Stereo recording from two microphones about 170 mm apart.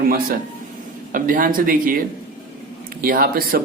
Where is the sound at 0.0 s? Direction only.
60° right (ahead or behind).